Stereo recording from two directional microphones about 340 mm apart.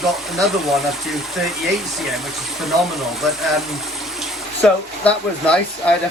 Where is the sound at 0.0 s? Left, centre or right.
Centre.